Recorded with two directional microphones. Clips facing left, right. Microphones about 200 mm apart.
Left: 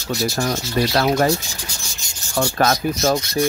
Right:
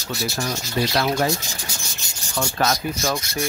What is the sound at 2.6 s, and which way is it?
Rub, 50° left (ahead or behind).